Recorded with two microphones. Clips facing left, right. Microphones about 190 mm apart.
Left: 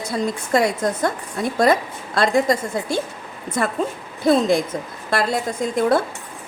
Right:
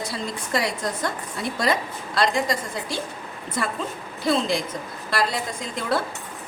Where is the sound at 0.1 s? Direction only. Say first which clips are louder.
Left 12 dB; 45° left (ahead or behind).